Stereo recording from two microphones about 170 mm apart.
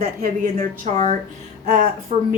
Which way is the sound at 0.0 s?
60° right (ahead or behind).